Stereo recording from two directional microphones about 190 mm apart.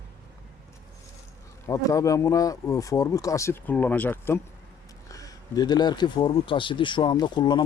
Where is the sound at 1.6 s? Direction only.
15° left (ahead or behind).